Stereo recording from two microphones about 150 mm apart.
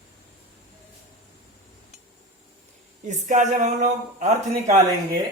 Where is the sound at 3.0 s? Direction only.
55° right (ahead or behind).